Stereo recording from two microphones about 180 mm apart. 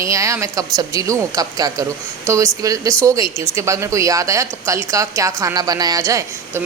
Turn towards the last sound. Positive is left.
turn(degrees=-20)  # may be behind; listen again after turning